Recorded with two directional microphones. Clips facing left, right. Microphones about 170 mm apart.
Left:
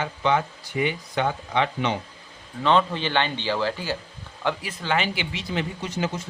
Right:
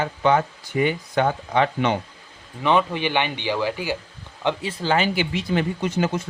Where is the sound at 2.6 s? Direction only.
15° right (ahead or behind).